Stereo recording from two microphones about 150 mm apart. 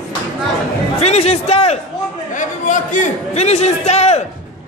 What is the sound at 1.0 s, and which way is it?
Speech, 45° left (ahead or behind).